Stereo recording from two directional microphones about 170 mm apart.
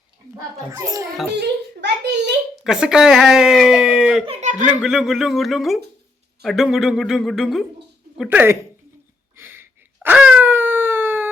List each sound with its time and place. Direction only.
0.7 s a child's voice: 20° right (ahead or behind)
1.4 s a child's voice: 90° right
2.6 s speech: 5° right (ahead or behind)
4.3 s a sound: 45° right (ahead or behind)
4.8 s speech: 5° right (ahead or behind)
9.3 s a sound: 15° right (ahead or behind)